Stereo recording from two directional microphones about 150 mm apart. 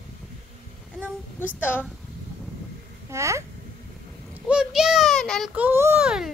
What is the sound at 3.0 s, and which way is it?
Speech, 20° right (ahead or behind).